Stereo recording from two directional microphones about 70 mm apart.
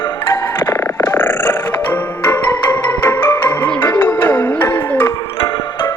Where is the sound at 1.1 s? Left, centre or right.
Left.